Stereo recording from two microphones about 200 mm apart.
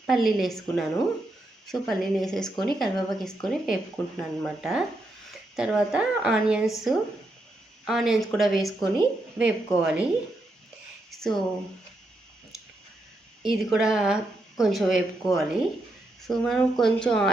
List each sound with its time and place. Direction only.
0.1 s speech: centre (ahead or behind)
11.1 s speech: centre (ahead or behind)
13.4 s speech: centre (ahead or behind)